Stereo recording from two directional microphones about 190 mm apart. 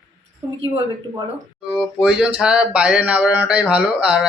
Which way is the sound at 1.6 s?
5° right (ahead or behind).